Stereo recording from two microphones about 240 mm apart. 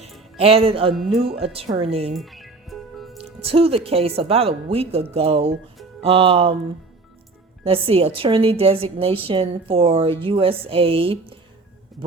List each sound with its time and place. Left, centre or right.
0.3 s a woman's voice: right
2.1 s music: centre
3.4 s a woman's voice: right
7.6 s a woman's voice: right